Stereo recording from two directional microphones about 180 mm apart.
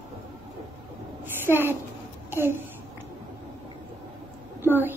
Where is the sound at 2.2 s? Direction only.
15° right (ahead or behind).